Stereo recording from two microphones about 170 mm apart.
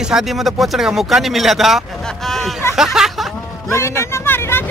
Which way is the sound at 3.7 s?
15° left (ahead or behind).